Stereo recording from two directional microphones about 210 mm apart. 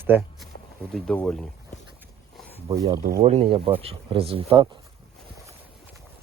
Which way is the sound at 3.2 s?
30° right (ahead or behind).